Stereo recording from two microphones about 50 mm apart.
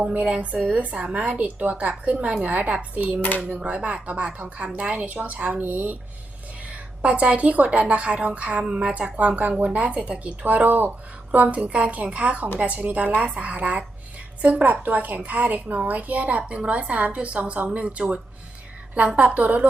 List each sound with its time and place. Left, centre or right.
0.0 s a woman's voice: right
7.0 s a woman's voice: right